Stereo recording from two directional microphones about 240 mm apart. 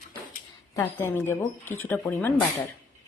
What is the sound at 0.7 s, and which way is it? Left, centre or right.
Speech, centre.